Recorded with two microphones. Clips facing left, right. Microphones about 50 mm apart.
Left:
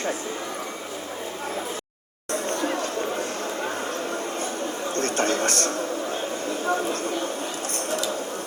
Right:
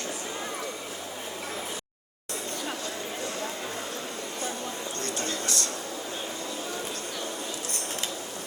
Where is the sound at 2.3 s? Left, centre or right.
Left.